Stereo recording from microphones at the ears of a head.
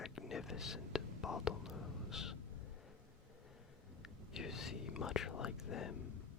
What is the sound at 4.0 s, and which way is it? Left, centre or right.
Whispering, left.